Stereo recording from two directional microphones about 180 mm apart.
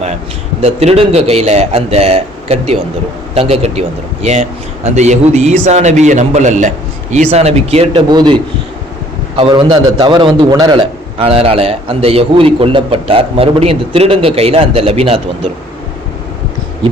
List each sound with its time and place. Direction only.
0.6 s a man's voice: 35° right (ahead or behind)